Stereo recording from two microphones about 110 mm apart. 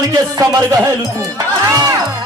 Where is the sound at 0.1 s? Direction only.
35° right (ahead or behind).